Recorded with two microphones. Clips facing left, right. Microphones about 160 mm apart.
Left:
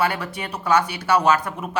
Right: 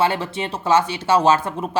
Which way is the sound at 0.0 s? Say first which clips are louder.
Right 3 dB; 25° right (ahead or behind).